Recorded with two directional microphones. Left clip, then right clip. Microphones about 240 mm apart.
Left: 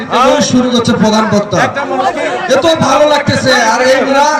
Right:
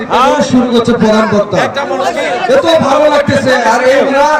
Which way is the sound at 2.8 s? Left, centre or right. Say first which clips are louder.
Even; left.